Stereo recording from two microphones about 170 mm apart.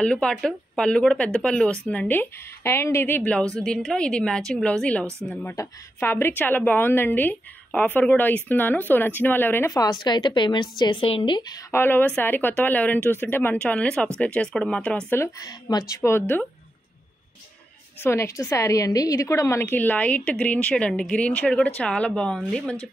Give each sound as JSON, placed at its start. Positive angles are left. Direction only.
{"t": 0.0, "sound": "a woman's voice", "side_deg": 5}
{"t": 11.7, "sound": "a woman's voice", "side_deg": 10}
{"t": 18.0, "sound": "a woman's voice", "side_deg": 15}